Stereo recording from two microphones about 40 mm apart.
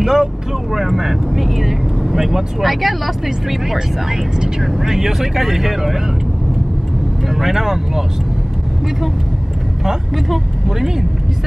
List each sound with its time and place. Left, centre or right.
0.0 s speech: centre
7.2 s speech: centre
9.8 s speech: centre